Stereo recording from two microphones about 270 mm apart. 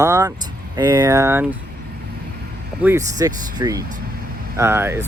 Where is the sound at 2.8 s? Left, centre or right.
Centre.